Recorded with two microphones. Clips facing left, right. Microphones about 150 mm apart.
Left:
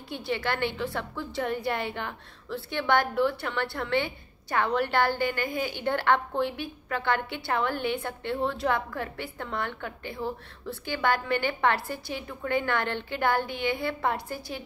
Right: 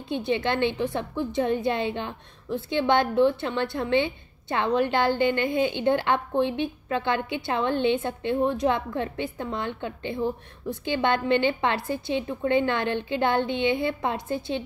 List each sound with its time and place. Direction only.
0.1 s a woman's voice: 20° right (ahead or behind)